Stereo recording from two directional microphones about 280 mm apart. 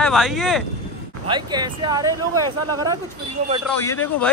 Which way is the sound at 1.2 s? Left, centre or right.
Centre.